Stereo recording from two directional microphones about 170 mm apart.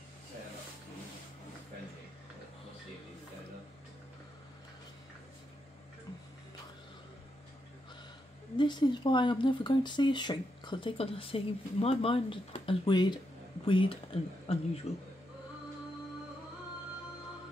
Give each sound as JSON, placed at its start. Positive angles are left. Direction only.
{"t": 8.5, "sound": "speech", "side_deg": 25}